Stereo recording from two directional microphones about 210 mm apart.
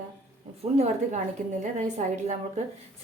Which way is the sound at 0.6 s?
30° right (ahead or behind).